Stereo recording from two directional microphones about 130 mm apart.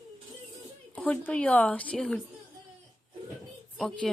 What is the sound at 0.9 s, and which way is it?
A woman's voice, 10° left (ahead or behind).